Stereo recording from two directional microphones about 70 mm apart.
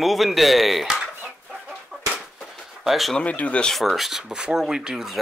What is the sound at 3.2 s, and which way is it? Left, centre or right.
Speech, left.